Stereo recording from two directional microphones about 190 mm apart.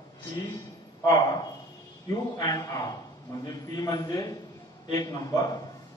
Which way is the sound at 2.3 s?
20° left (ahead or behind).